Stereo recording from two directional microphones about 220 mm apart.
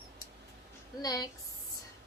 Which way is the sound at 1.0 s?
15° left (ahead or behind).